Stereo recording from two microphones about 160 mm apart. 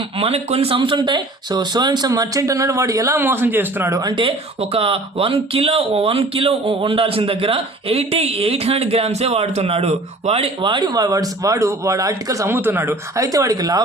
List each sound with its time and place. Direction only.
0.2 s speech: 40° right (ahead or behind); by 4.1 s 20° right (ahead or behind)
4.1 s speech: 35° right (ahead or behind)